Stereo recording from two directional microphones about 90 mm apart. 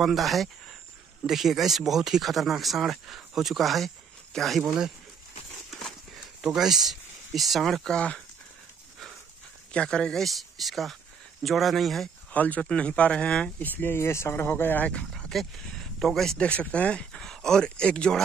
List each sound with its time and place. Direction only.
0.0 s speech: centre (ahead or behind)
6.4 s speech: 5° right (ahead or behind)
9.7 s speech: 10° left (ahead or behind)
12.3 s speech: 15° left (ahead or behind)
14.9 s speech: 10° left (ahead or behind)